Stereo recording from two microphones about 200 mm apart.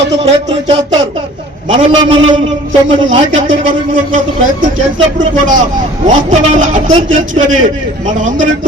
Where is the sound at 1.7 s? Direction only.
25° right (ahead or behind).